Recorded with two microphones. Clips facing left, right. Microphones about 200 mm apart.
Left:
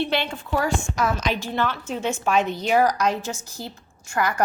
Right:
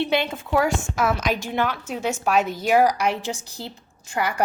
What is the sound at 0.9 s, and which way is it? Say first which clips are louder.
A woman's voice: right 1 dB; 5° right (ahead or behind).